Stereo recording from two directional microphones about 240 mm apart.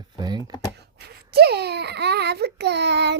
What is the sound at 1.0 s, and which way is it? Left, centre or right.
A child's voice, right.